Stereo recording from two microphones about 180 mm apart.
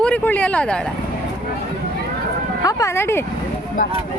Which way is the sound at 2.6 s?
15° left (ahead or behind).